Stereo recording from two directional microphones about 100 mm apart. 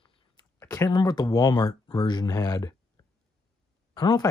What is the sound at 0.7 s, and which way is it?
Speech, 40° left (ahead or behind).